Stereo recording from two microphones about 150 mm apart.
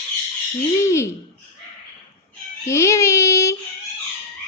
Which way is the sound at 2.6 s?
20° left (ahead or behind).